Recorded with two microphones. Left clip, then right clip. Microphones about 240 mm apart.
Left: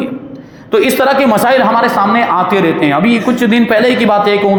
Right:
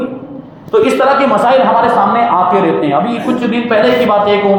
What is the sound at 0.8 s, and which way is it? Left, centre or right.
Speech, left.